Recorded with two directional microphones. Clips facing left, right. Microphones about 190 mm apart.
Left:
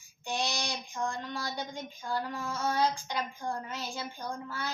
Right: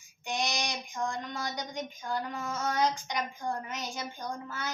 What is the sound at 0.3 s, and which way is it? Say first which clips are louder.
Child singing: right 1 dB; 20° right (ahead or behind).